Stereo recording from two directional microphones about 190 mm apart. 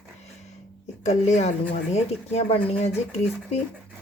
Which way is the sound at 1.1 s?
35° left (ahead or behind).